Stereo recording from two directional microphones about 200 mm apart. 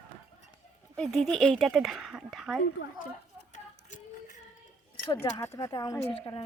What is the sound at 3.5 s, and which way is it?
Music, 40° left (ahead or behind).